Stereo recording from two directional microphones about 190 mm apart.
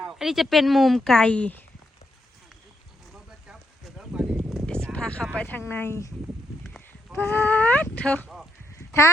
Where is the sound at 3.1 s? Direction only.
Centre (ahead or behind); by 6.1 s 15° left (ahead or behind).